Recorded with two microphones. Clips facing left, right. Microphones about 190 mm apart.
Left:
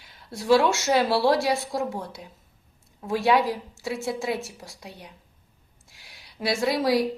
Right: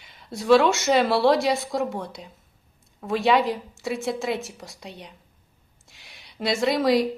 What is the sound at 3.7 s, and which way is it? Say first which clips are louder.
Speech: right 2 dB; 65° right (ahead or behind).